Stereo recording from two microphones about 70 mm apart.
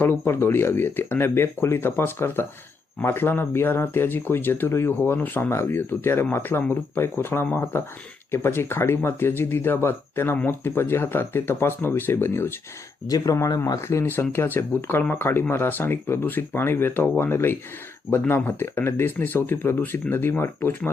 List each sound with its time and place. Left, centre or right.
0.0 s speech: left
13.1 s speech: left
13.8 s speech: left